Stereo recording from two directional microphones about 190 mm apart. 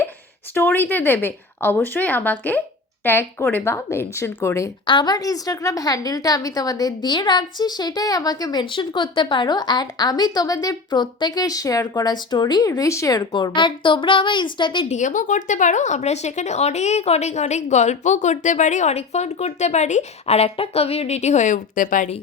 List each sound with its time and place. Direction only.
0.5 s speech: 10° left (ahead or behind)
14.9 s speech: 40° left (ahead or behind)